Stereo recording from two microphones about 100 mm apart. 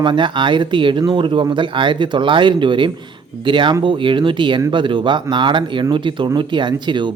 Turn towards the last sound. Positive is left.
turn(degrees=-50)  # may be behind; listen again after turning